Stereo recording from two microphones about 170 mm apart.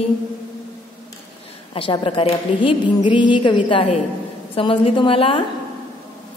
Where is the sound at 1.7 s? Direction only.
30° left (ahead or behind).